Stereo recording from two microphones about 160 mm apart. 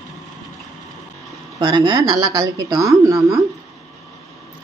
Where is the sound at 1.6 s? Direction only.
25° right (ahead or behind).